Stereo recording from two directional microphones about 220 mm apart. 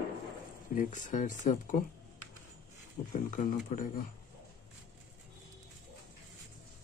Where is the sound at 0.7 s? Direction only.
35° left (ahead or behind).